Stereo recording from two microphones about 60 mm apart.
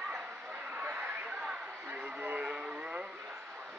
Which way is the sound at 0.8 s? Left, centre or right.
Right.